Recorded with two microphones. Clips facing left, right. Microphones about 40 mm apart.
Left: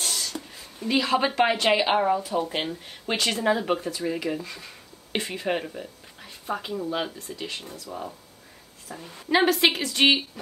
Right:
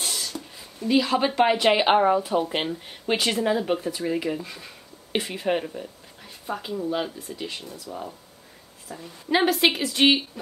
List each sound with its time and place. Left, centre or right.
0.0 s a sound: centre
0.7 s a woman's voice: centre
1.8 s speech: centre
2.4 s speech: centre
3.4 s speech: centre
4.3 s a sound: centre
5.2 s a woman's voice: centre